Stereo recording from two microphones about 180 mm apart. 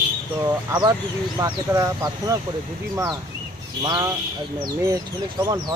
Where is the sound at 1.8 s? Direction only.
15° right (ahead or behind).